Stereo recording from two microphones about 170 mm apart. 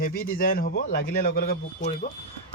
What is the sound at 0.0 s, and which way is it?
A man's voice, 60° left (ahead or behind).